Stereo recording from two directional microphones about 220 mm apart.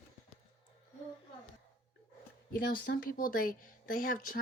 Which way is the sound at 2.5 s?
40° left (ahead or behind).